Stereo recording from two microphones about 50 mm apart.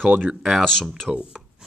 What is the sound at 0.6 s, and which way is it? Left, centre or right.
Speech, centre.